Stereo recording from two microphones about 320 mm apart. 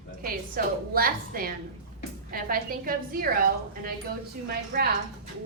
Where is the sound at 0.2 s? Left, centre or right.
Right.